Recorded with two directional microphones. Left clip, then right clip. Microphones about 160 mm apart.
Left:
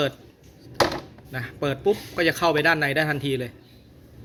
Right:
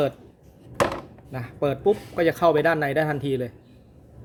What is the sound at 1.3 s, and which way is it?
Speech, 25° right (ahead or behind).